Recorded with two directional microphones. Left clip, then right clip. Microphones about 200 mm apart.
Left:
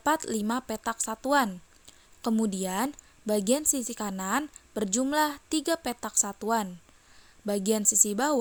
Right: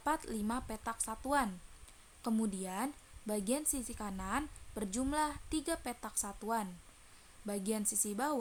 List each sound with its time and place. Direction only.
0.0 s a woman's voice: 35° left (ahead or behind)